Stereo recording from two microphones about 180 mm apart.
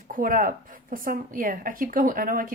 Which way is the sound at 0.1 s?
50° right (ahead or behind).